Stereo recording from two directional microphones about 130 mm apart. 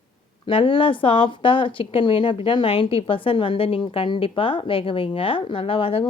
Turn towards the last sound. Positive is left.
turn(degrees=45)  # may be behind; listen again after turning